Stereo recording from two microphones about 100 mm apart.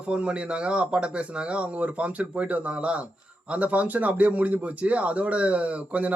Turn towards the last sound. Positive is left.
turn(degrees=-15)  # may be behind; listen again after turning